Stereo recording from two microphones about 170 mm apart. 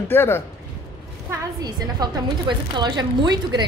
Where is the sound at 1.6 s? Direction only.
25° right (ahead or behind).